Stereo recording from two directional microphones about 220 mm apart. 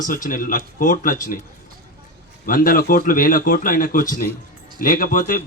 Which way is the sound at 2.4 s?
40° left (ahead or behind).